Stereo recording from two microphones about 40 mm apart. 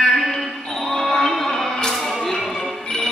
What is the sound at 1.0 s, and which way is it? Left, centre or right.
Music, centre.